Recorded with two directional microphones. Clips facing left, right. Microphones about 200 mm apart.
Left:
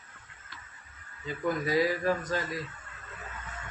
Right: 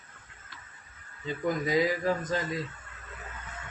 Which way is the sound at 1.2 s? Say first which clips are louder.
Right 1 dB; 20° right (ahead or behind).